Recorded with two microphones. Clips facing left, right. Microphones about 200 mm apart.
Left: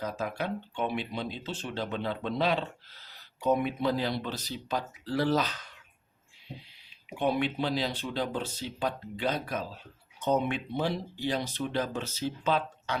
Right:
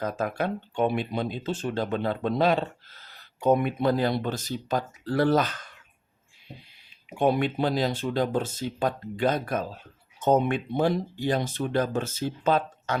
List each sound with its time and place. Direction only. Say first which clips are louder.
0.0 s speech: right 5 dB; 50° right (ahead or behind)
7.2 s speech: right 5 dB; 45° right (ahead or behind)